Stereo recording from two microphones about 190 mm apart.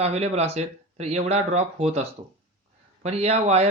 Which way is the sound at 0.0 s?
35° right (ahead or behind).